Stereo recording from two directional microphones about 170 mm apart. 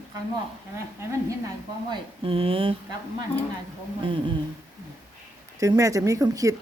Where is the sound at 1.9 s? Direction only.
30° right (ahead or behind).